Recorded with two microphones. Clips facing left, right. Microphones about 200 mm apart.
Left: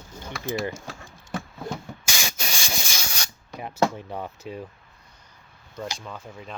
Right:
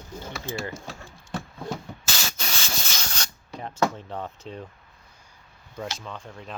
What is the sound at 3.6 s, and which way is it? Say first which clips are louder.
Speech: left 2 dB; 10° left (ahead or behind).